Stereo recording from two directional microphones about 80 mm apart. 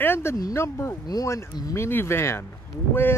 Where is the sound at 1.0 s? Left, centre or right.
Left.